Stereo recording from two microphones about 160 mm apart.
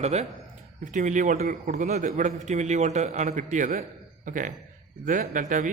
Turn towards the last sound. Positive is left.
turn(degrees=-55)  # may be behind; listen again after turning